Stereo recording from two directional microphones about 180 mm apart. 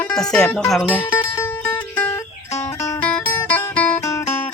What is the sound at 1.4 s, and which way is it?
Music, 10° left (ahead or behind).